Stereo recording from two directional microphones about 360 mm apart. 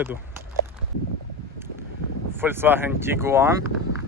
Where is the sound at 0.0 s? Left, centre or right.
Centre.